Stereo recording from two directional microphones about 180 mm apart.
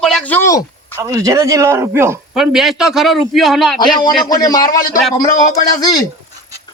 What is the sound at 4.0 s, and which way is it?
Speech, 20° left (ahead or behind).